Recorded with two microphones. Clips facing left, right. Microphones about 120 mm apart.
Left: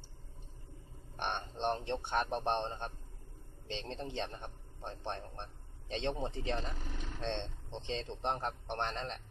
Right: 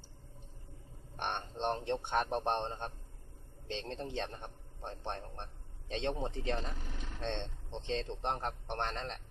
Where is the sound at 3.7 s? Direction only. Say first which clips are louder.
Right 1 dB; centre (ahead or behind).